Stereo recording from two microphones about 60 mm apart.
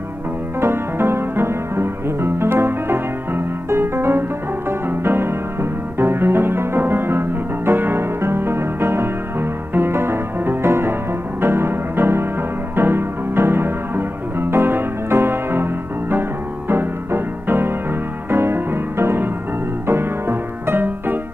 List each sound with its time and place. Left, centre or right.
0.6 s music: right
4.6 s piano: right
11.4 s music: right